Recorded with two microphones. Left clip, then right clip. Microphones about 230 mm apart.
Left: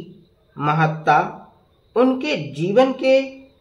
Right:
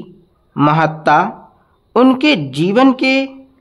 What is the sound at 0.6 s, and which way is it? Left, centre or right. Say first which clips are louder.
Speech: right 7 dB; right.